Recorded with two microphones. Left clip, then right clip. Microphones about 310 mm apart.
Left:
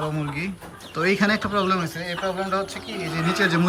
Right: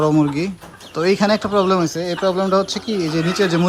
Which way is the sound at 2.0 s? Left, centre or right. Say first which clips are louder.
Right 8 dB; right.